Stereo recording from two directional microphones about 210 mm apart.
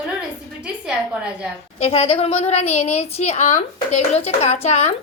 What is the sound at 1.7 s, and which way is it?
A woman's voice, 30° left (ahead or behind).